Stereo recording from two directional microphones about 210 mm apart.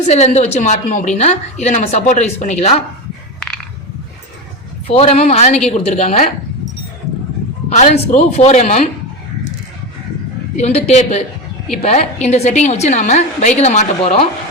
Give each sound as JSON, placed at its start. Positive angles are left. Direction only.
{"t": 0.1, "sound": "a woman's voice", "side_deg": 30}
{"t": 3.4, "sound": "a sound", "side_deg": 5}
{"t": 4.9, "sound": "a woman's voice", "side_deg": 30}
{"t": 7.7, "sound": "a woman's voice", "side_deg": 30}
{"t": 10.6, "sound": "a woman's voice", "side_deg": 30}